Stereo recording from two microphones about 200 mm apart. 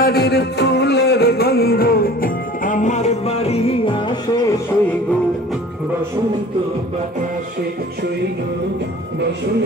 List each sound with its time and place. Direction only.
0.0 s music: 50° left (ahead or behind); by 4.2 s 25° left (ahead or behind)